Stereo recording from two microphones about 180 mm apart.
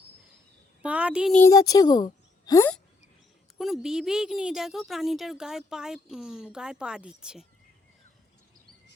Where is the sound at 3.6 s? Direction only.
Centre (ahead or behind).